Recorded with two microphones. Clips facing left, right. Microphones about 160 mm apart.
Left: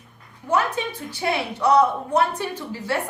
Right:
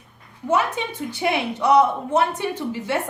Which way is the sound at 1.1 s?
20° right (ahead or behind).